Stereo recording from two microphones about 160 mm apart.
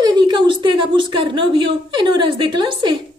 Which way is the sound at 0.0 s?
30° right (ahead or behind).